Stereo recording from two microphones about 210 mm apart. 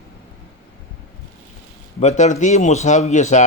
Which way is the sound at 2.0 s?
30° left (ahead or behind).